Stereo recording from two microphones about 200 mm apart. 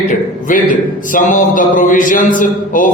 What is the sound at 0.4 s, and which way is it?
A man's voice, 40° left (ahead or behind).